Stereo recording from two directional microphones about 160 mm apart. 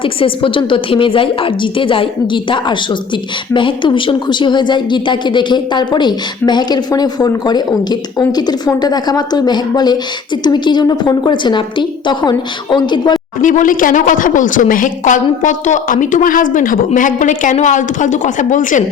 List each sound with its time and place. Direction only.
0.0 s a woman's voice: 35° left (ahead or behind)
13.4 s a woman's voice: 55° left (ahead or behind)